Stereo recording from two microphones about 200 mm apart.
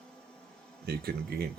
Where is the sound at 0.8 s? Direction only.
50° right (ahead or behind).